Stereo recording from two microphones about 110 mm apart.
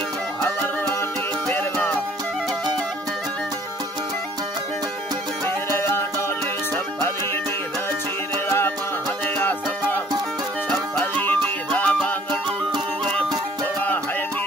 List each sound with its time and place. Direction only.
0.4 s music: 20° left (ahead or behind)
5.8 s music: 20° left (ahead or behind)
8.5 s music: 20° left (ahead or behind)